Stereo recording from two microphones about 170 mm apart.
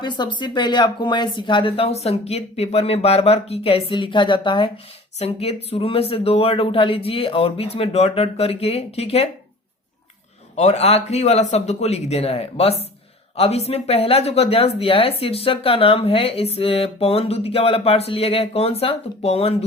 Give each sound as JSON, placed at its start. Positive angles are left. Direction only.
{"t": 0.0, "sound": "speech", "side_deg": 25}
{"t": 10.5, "sound": "speech", "side_deg": 40}